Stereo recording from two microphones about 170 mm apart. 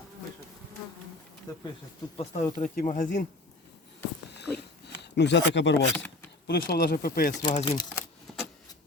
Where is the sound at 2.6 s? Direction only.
50° left (ahead or behind).